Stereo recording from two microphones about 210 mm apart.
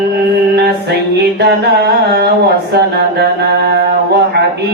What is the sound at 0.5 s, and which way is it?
Music, 50° right (ahead or behind).